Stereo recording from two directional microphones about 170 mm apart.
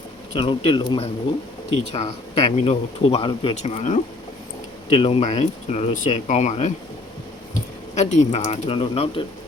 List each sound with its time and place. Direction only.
0.3 s speech: 30° left (ahead or behind)
1.9 s speech: 40° left (ahead or behind)
3.5 s speech: 40° left (ahead or behind)
7.9 s speech: 45° left (ahead or behind)